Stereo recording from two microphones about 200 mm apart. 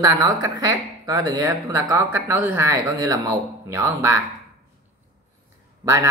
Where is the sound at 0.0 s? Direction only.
20° right (ahead or behind).